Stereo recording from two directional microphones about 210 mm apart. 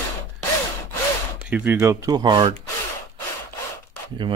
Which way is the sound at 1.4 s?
5° right (ahead or behind).